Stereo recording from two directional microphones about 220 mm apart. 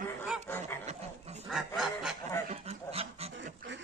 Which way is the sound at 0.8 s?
30° right (ahead or behind).